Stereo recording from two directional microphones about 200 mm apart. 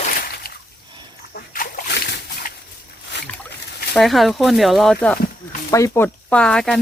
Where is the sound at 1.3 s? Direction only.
45° left (ahead or behind).